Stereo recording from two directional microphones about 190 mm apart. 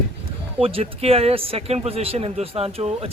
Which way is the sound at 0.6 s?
30° right (ahead or behind).